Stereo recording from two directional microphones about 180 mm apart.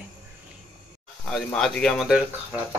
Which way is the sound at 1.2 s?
5° left (ahead or behind).